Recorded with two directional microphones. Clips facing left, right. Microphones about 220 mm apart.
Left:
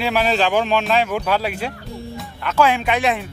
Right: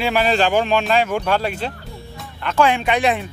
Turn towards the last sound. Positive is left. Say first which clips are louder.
# right 1 dB
turn(degrees=0)  # may be behind; listen again after turning